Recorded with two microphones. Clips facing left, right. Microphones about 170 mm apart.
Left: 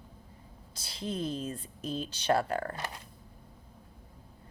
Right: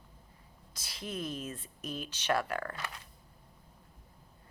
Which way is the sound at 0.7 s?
30° left (ahead or behind).